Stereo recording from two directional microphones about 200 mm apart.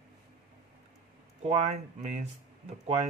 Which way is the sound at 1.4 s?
35° right (ahead or behind).